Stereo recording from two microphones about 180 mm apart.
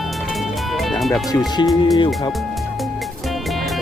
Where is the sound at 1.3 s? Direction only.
20° left (ahead or behind).